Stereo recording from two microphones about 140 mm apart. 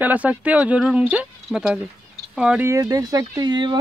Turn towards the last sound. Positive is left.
turn(degrees=-30)  # may be behind; listen again after turning